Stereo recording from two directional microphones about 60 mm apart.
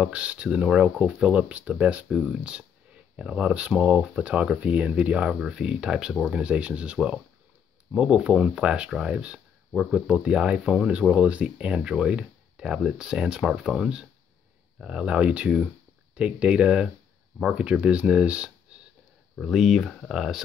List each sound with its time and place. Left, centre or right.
0.0 s speech: centre
19.3 s speech: centre